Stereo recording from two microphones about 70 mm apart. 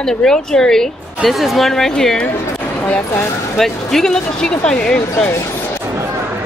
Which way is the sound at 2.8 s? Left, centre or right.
Left.